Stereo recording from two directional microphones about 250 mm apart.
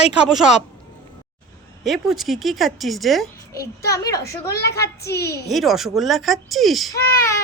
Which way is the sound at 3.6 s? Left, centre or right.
Left.